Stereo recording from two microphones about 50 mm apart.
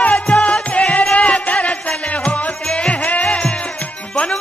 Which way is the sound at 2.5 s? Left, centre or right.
Centre.